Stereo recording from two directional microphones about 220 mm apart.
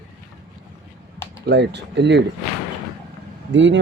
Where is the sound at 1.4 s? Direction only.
50° right (ahead or behind).